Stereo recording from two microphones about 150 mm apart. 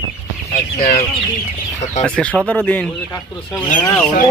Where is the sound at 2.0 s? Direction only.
5° left (ahead or behind).